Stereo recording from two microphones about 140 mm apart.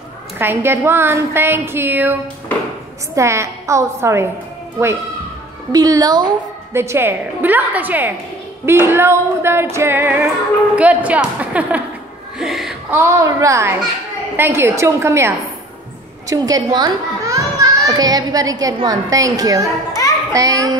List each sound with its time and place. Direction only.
0.4 s a woman's voice: 15° right (ahead or behind)
3.2 s a woman's voice: 20° right (ahead or behind)
5.7 s a woman's voice: 25° right (ahead or behind); by 11.8 s 10° right (ahead or behind)
12.4 s a sound: 5° right (ahead or behind)
12.9 s a woman's voice: 20° right (ahead or behind)